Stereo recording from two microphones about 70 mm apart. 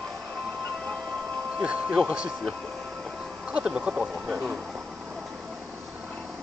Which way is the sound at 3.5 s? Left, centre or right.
Centre.